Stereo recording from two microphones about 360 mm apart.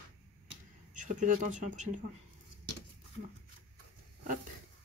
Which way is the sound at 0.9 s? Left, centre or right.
Right.